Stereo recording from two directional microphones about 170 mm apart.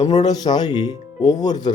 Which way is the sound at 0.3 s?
25° left (ahead or behind).